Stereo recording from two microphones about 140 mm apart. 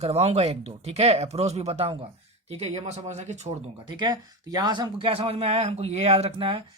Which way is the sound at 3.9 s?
30° right (ahead or behind).